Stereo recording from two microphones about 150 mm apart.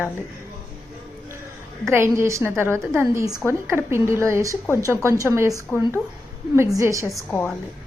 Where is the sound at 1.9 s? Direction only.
15° right (ahead or behind).